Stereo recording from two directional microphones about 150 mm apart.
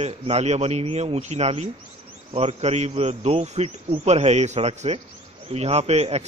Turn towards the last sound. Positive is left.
turn(degrees=-45)  # may be behind; listen again after turning